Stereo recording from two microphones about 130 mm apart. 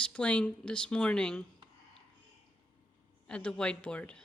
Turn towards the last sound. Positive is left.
turn(degrees=10)  # may be behind; listen again after turning